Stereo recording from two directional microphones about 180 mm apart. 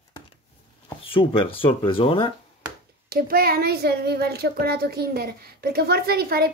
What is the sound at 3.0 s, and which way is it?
Speech, 55° right (ahead or behind).